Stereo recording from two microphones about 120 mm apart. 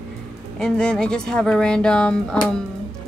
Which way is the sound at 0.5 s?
5° left (ahead or behind).